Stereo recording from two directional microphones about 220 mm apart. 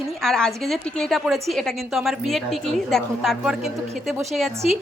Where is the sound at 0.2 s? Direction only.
Centre (ahead or behind).